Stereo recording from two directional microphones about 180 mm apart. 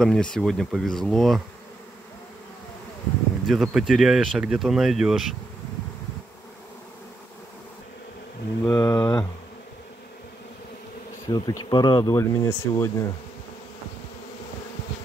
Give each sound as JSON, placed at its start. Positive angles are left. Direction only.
{"t": 0.0, "sound": "speech", "side_deg": 5}
{"t": 3.4, "sound": "speech", "side_deg": 0}
{"t": 8.6, "sound": "speech", "side_deg": 20}
{"t": 11.2, "sound": "speech", "side_deg": 20}